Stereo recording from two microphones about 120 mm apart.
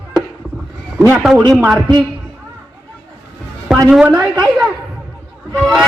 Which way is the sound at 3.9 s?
5° right (ahead or behind).